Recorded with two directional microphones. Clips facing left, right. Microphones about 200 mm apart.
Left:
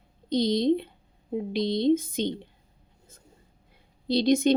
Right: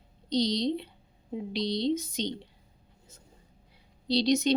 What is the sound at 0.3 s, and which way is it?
Speech, 50° left (ahead or behind).